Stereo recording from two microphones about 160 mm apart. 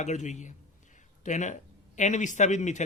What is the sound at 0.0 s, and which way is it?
Speech, 50° left (ahead or behind).